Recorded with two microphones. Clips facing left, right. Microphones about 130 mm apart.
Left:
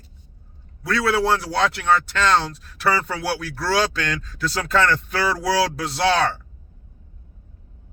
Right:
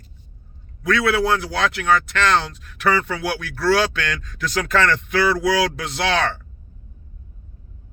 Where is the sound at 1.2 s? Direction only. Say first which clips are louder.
Even; 35° left (ahead or behind).